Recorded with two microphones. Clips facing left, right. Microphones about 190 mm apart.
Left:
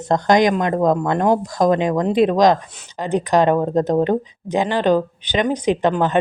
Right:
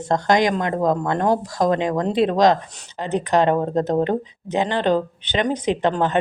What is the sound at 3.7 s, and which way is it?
Speech, 15° left (ahead or behind).